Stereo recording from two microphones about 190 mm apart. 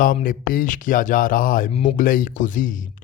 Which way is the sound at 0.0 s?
45° left (ahead or behind).